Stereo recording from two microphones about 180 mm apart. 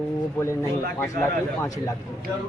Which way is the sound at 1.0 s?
15° left (ahead or behind).